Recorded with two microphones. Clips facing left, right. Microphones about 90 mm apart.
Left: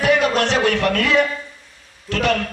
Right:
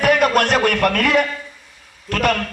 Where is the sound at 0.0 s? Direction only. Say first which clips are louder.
Right 2 dB; 55° right (ahead or behind).